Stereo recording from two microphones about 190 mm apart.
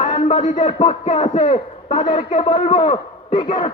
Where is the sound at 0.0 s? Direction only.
30° left (ahead or behind).